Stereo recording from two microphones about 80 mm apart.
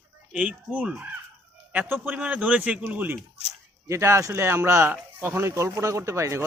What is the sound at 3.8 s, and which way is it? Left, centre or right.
Speech, right.